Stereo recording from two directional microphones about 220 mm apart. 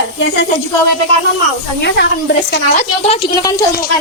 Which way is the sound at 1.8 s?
50° left (ahead or behind).